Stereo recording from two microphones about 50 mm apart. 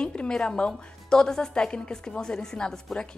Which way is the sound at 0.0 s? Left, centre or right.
Centre.